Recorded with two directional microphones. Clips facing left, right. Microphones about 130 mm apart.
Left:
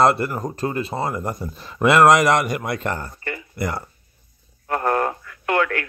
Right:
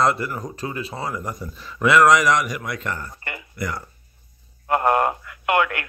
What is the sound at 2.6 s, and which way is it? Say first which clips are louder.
Speech: left 4 dB; 35° left (ahead or behind).